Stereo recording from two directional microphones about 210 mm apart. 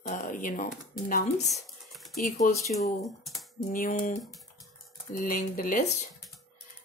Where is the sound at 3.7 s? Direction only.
40° left (ahead or behind).